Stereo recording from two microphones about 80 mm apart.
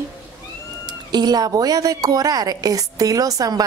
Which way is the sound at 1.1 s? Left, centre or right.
Right.